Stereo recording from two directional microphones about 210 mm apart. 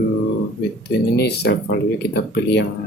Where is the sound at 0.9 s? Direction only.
50° left (ahead or behind).